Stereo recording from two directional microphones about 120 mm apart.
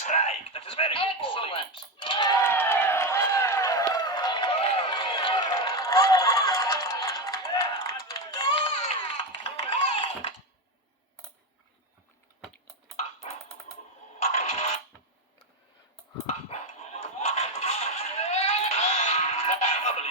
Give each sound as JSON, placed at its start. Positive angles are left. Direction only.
{"t": 0.0, "sound": "speech", "side_deg": 75}
{"t": 2.4, "sound": "a sound", "side_deg": 20}
{"t": 13.7, "sound": "typing", "side_deg": 75}
{"t": 14.3, "sound": "music", "side_deg": 60}
{"t": 16.2, "sound": "music", "side_deg": 65}